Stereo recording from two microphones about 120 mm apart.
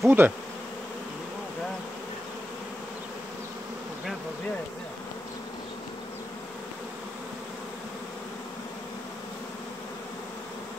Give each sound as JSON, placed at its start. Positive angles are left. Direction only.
{"t": 0.0, "sound": "bee", "side_deg": -15}